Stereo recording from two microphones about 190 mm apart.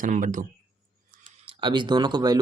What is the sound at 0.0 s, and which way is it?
Speech, 45° right (ahead or behind).